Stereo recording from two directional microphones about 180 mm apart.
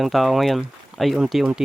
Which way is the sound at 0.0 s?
Centre (ahead or behind).